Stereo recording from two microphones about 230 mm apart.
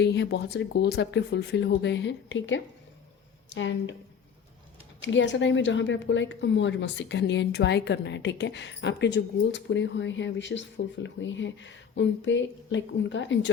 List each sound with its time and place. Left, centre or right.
0.0 s a woman's voice: left
4.9 s a woman's voice: left